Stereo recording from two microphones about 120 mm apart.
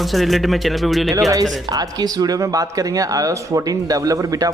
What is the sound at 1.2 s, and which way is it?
Speech, 30° right (ahead or behind).